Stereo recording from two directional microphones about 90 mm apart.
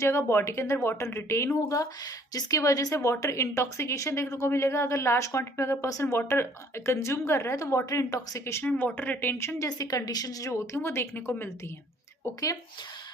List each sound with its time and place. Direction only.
0.0 s a woman's voice: 30° left (ahead or behind)
8.6 s speech: 15° left (ahead or behind)
9.6 s a woman's voice: 45° left (ahead or behind); by 11.5 s 25° left (ahead or behind)
12.2 s a woman's voice: 40° left (ahead or behind)